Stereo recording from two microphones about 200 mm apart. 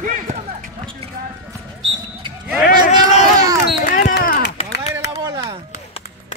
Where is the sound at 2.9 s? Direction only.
35° left (ahead or behind).